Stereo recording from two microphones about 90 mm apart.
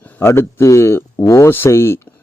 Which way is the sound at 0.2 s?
30° left (ahead or behind).